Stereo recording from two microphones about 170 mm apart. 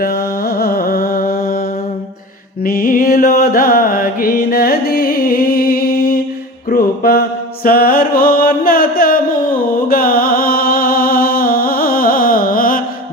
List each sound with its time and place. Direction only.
0.0 s music: 65° left (ahead or behind)
2.6 s music: 60° left (ahead or behind)
6.7 s mantra: 60° left (ahead or behind)